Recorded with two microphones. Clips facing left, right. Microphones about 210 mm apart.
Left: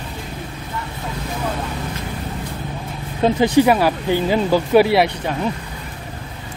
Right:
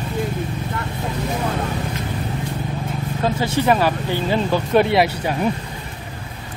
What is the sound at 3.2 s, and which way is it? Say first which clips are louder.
Speech: left 7 dB; 15° left (ahead or behind).